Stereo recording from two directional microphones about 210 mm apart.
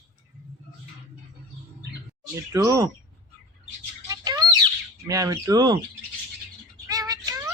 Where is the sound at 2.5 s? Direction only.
15° right (ahead or behind).